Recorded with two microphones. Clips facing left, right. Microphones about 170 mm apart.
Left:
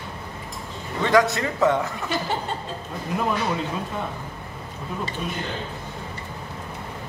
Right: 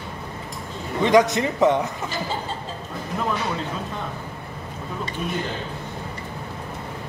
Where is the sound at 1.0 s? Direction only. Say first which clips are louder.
Right 2 dB; 20° right (ahead or behind).